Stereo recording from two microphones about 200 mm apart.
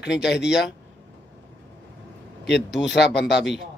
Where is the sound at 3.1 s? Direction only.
60° left (ahead or behind).